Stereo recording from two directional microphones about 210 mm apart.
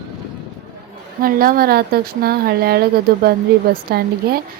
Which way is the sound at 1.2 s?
45° right (ahead or behind).